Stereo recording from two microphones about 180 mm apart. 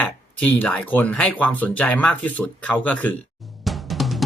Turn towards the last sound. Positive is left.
turn(degrees=0)  # may be behind; listen again after turning